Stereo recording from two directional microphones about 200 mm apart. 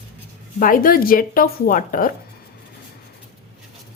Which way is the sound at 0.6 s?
45° left (ahead or behind).